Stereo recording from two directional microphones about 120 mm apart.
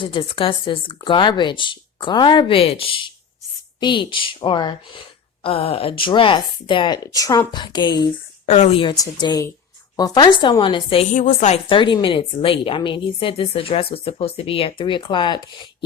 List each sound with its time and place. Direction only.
0.0 s a woman's voice: 45° left (ahead or behind)
5.4 s speech: 55° left (ahead or behind); by 8.1 s 35° left (ahead or behind)
8.4 s speech: 65° left (ahead or behind)
8.8 s speech: 40° left (ahead or behind)
11.1 s a woman's voice: 90° left; by 11.6 s 75° left (ahead or behind)
11.7 s a woman's voice: 40° left (ahead or behind)